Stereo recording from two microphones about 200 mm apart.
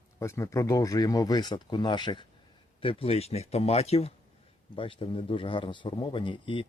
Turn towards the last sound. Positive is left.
turn(degrees=25)  # may be behind; listen again after turning